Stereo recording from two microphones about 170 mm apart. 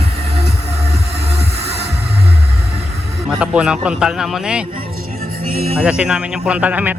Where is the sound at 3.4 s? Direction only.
5° right (ahead or behind).